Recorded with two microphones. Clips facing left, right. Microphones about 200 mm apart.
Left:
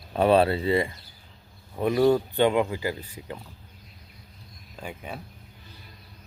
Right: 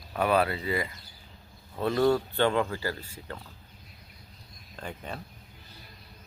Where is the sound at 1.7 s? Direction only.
15° left (ahead or behind).